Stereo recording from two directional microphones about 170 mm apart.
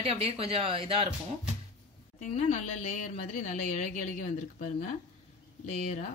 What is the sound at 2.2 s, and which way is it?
A woman's voice, 45° left (ahead or behind).